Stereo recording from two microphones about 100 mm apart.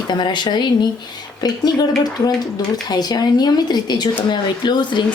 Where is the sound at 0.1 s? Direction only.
50° left (ahead or behind).